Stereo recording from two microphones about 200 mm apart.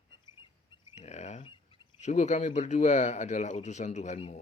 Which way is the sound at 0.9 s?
35° left (ahead or behind).